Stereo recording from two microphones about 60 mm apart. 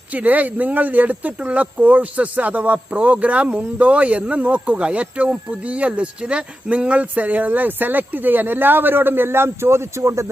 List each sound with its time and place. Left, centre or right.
0.1 s speech: right